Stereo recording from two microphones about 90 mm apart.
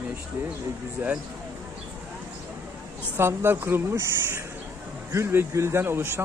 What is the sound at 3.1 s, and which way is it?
Speech, 25° right (ahead or behind).